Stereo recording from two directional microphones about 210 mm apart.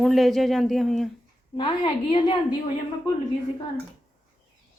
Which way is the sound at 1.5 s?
25° left (ahead or behind).